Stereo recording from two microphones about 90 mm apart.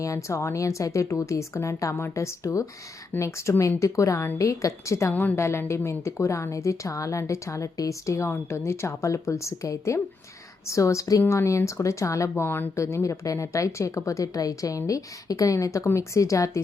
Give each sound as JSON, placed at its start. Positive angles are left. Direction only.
{"t": 0.0, "sound": "speech", "side_deg": 35}